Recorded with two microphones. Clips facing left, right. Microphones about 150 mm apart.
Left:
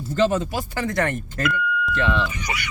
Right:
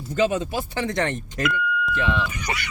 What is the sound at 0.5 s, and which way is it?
Speech, 20° right (ahead or behind).